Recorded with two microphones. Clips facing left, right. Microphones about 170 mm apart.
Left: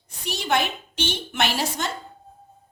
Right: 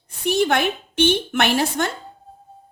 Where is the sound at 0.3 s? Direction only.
55° right (ahead or behind).